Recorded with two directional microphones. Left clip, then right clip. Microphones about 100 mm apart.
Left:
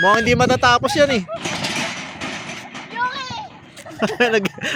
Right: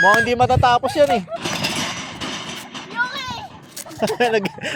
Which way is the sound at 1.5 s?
20° right (ahead or behind).